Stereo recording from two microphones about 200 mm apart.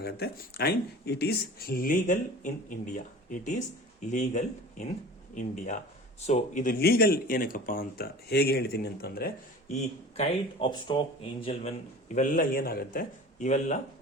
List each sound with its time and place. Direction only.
0.0 s speech: 50° left (ahead or behind)
9.7 s speech: 35° left (ahead or behind)
10.7 s speech: 25° left (ahead or behind)
12.1 s speech: 40° left (ahead or behind)